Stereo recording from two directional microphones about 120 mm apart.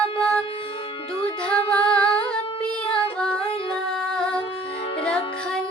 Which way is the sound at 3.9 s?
5° left (ahead or behind).